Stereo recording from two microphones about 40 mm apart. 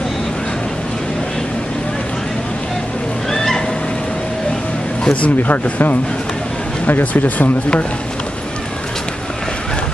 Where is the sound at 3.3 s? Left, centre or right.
Centre.